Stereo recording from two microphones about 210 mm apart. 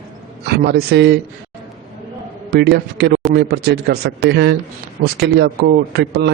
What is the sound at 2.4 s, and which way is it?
A man's voice, 50° right (ahead or behind).